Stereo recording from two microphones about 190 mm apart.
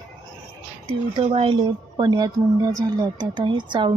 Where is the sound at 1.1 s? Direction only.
30° right (ahead or behind).